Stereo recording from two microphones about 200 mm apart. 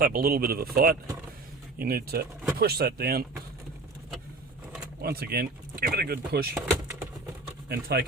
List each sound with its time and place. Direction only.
0.0 s speech: 45° right (ahead or behind)
5.0 s speech: 50° right (ahead or behind)
6.5 s speech: 5° right (ahead or behind)
7.7 s speech: 50° right (ahead or behind)